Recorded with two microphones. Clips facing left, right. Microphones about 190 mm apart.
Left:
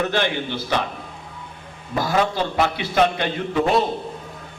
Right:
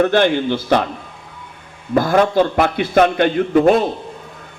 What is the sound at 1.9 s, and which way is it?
A man's voice, 55° right (ahead or behind).